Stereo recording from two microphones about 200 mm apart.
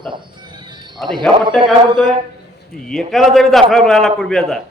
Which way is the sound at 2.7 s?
Centre (ahead or behind).